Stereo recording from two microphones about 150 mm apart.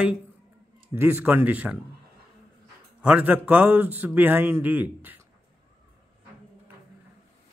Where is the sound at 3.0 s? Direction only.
10° right (ahead or behind).